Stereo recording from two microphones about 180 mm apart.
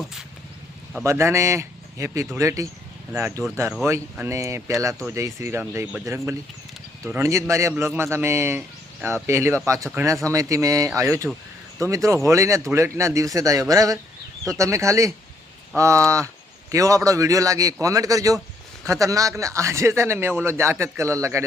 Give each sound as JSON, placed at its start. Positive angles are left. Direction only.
{"t": 0.0, "sound": "vehicle", "side_deg": 0}
{"t": 1.0, "sound": "speech", "side_deg": -15}